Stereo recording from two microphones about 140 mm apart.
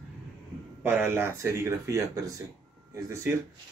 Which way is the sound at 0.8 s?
15° right (ahead or behind).